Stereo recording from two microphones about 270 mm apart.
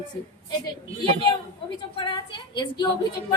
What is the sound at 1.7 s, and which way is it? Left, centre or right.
A woman's voice, centre.